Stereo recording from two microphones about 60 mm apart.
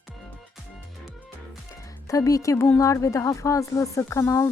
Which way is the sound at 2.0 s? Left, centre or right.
Left.